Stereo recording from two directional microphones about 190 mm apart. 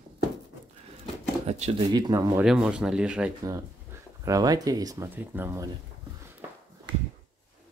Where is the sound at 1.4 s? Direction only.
35° right (ahead or behind).